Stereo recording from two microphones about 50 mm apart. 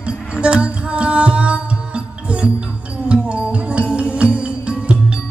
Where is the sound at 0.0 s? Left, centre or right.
Right.